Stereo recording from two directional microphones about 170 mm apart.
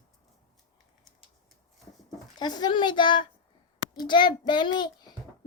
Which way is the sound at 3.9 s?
25° left (ahead or behind).